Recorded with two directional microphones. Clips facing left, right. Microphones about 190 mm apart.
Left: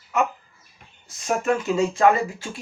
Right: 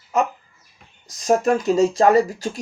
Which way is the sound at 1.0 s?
40° right (ahead or behind).